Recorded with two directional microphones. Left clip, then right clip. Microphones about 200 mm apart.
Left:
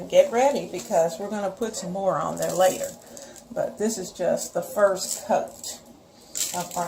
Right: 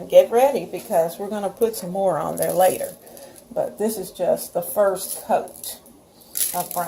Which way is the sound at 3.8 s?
20° right (ahead or behind).